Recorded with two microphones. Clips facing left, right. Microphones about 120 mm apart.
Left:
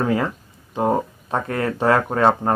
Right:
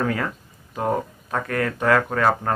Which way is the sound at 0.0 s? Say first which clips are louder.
Left 4 dB; 25° left (ahead or behind).